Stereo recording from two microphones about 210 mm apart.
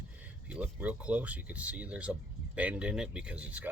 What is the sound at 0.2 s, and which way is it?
Speech, 5° right (ahead or behind).